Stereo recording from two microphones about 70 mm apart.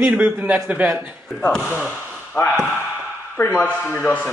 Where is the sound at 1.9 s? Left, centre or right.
Left.